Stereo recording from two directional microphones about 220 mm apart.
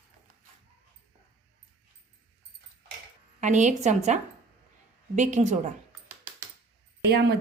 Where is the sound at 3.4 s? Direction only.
35° right (ahead or behind).